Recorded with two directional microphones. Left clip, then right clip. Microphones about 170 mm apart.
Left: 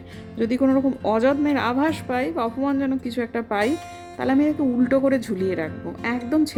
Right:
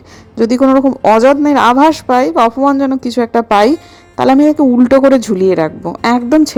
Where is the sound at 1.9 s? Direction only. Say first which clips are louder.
Right 14 dB; 35° right (ahead or behind).